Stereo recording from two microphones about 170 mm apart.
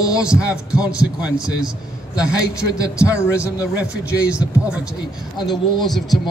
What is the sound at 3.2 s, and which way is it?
Speech, 15° left (ahead or behind).